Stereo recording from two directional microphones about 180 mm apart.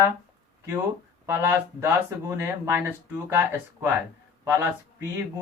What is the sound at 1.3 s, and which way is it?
Speech, 15° right (ahead or behind).